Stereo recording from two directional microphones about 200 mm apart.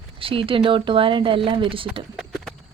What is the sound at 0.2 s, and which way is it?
A woman's voice, 25° right (ahead or behind).